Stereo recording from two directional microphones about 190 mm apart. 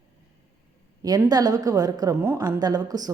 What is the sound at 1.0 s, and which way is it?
A woman's voice, 20° right (ahead or behind).